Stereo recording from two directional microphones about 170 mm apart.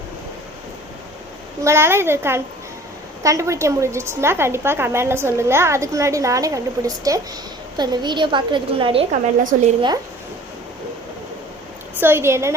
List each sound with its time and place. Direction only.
1.6 s a woman's voice: 15° right (ahead or behind); by 9.0 s 30° right (ahead or behind)
9.5 s speech: 55° right (ahead or behind)
11.9 s a woman's voice: 15° right (ahead or behind)